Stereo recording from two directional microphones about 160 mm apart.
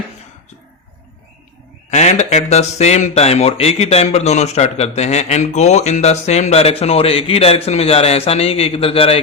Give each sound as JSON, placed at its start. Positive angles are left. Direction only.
{"t": 1.9, "sound": "speech", "side_deg": 45}